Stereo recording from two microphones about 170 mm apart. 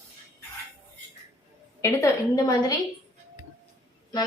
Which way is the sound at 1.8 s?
20° left (ahead or behind).